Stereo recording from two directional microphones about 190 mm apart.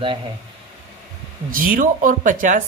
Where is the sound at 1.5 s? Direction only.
50° right (ahead or behind).